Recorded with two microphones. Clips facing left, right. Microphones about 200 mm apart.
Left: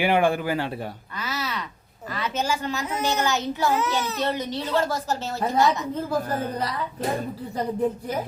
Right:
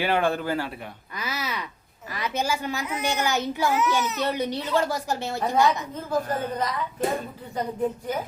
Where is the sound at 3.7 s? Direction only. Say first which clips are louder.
Right 1 dB; 30° left (ahead or behind).